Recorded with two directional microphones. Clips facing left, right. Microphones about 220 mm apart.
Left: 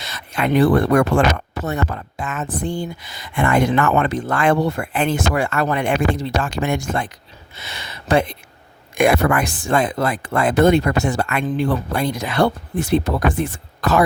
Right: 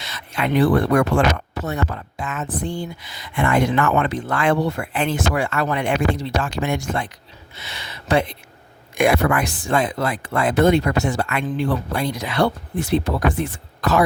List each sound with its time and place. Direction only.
0.0 s speech: 45° left (ahead or behind)